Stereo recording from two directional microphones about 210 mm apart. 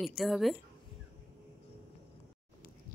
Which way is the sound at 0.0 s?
Centre (ahead or behind).